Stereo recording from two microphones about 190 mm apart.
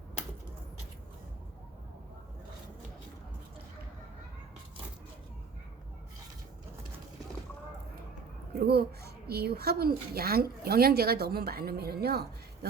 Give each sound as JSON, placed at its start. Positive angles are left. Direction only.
{"t": 8.6, "sound": "speech", "side_deg": -55}